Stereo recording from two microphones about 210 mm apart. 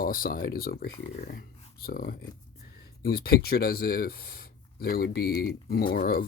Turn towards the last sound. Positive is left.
turn(degrees=45)  # may be behind; listen again after turning